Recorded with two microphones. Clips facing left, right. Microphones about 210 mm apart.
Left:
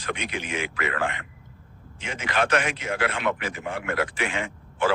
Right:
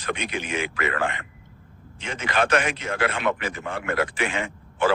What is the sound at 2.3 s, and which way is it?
Speech, 45° right (ahead or behind).